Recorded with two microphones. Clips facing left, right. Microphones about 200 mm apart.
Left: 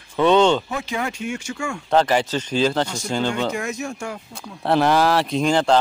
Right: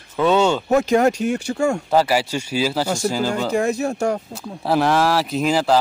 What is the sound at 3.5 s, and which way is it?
Speech, 35° right (ahead or behind).